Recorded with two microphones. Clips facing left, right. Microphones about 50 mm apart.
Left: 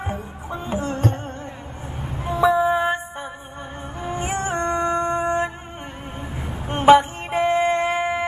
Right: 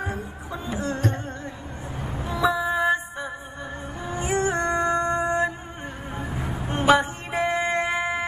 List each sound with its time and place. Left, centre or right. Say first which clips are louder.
0.0 s music: left 1 dB; left
2.2 s music: left 6 dB; left
6.7 s a sound: left 6 dB; left
7.8 s shofar: left 3 dB; left